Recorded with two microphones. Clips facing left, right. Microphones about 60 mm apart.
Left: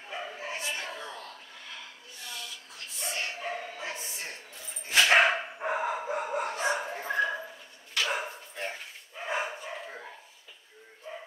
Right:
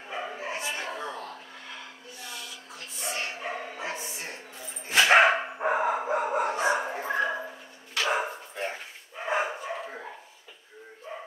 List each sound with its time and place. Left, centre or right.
0.1 s dog: centre
1.0 s a sound: right
2.2 s a sound: centre
5.1 s dog: centre
8.5 s bow-wow: centre
9.2 s dog: centre
11.1 s bow-wow: centre